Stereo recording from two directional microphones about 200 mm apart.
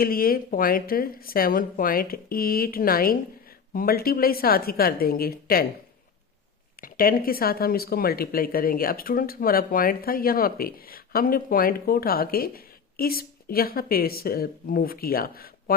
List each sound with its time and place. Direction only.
0.0 s speech: 45° left (ahead or behind)
6.8 s speech: 45° left (ahead or behind)